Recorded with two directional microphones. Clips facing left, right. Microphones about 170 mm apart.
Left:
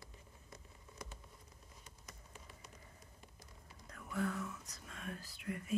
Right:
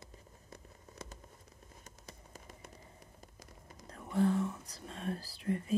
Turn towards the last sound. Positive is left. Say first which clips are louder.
# right 7 dB
turn(degrees=-30)  # may be behind; listen again after turning